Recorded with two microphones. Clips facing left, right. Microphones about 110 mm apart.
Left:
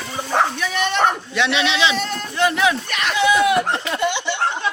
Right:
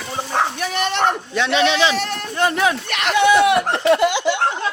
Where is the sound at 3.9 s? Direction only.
90° right.